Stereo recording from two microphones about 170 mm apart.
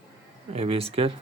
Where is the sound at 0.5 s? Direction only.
35° right (ahead or behind).